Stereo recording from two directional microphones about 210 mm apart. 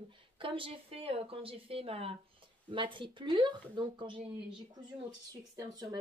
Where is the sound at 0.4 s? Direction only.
25° right (ahead or behind).